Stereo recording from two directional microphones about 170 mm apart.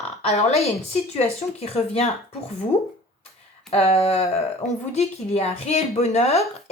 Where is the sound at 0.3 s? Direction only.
40° left (ahead or behind).